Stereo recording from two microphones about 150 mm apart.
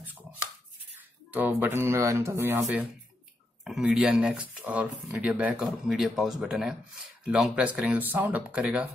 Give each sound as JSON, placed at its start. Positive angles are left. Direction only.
{"t": 0.9, "sound": "speech", "side_deg": -10}